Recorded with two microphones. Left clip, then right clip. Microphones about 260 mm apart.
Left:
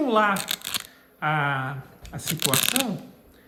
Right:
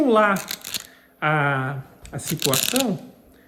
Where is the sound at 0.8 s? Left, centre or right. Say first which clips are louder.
Right 2 dB; centre.